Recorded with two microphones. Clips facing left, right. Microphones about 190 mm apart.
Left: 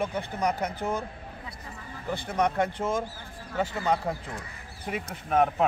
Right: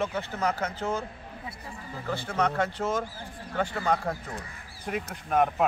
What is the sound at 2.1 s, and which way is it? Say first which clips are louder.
A man's voice: left 1 dB; 15° left (ahead or behind).